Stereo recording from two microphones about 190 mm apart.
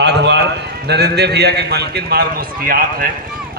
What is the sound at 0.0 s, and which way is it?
A man's voice, 65° right (ahead or behind).